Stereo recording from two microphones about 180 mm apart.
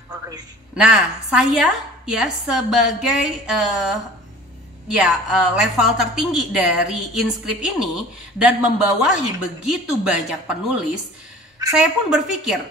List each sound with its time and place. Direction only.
0.7 s a woman's voice: 5° right (ahead or behind)